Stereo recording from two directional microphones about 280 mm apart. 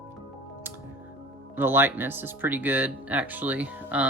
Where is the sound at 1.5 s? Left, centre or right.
Centre.